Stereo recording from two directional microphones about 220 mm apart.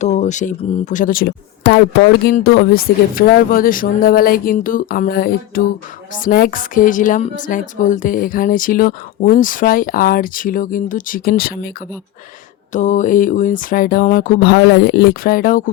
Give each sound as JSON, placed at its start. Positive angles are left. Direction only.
{"t": 0.0, "sound": "a woman's voice", "side_deg": 30}
{"t": 12.7, "sound": "a woman's voice", "side_deg": 35}